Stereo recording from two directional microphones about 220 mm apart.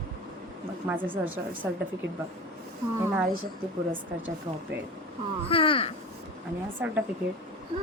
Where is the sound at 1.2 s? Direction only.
5° right (ahead or behind).